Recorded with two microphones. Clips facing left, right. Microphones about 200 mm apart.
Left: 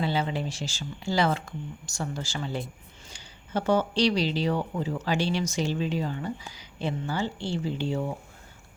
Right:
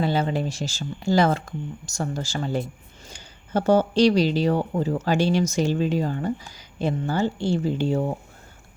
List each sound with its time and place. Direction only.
0.0 s speech: 45° right (ahead or behind)